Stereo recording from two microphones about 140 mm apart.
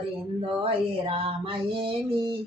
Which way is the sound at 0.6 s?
40° right (ahead or behind).